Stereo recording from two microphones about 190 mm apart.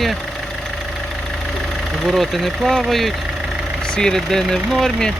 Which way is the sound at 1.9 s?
Centre (ahead or behind).